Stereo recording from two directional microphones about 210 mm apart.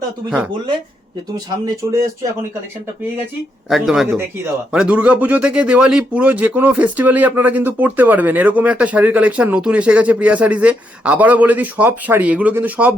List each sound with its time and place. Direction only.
1.5 s speech: 20° right (ahead or behind)
3.7 s speech: centre (ahead or behind)